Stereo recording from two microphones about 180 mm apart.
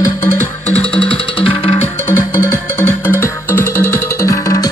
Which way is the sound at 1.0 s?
30° left (ahead or behind).